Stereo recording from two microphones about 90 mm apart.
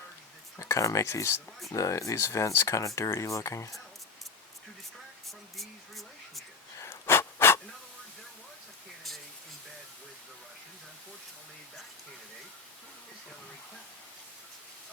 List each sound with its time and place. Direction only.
0.6 s speech: 35° left (ahead or behind)
5.5 s a sound: centre (ahead or behind)
6.7 s pant: 30° left (ahead or behind)